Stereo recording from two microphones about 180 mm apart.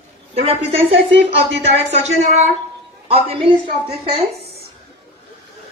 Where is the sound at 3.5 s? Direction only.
30° right (ahead or behind).